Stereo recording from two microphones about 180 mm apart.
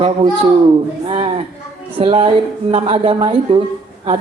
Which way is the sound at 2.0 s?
30° right (ahead or behind).